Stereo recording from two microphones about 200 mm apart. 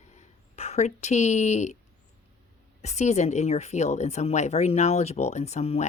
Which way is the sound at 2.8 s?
35° left (ahead or behind).